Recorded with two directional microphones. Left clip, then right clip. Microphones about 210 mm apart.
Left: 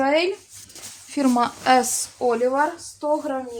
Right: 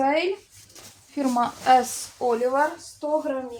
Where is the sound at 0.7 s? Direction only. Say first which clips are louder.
Left 5 dB; 40° left (ahead or behind).